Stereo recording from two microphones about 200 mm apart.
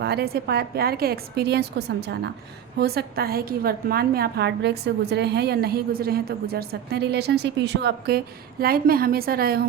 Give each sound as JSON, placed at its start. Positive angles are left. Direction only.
{"t": 0.0, "sound": "a woman's voice", "side_deg": -55}